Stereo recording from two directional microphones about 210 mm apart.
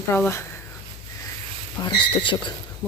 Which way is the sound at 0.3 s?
15° left (ahead or behind).